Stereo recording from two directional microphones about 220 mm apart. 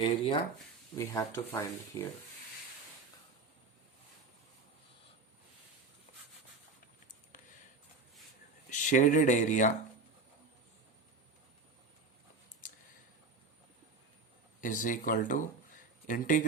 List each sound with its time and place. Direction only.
0.0 s speech: 25° left (ahead or behind)
6.1 s a sound: 35° left (ahead or behind)
8.7 s speech: 35° left (ahead or behind)
14.6 s speech: 35° left (ahead or behind)